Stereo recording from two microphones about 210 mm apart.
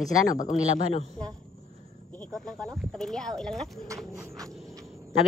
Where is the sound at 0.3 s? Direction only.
35° left (ahead or behind).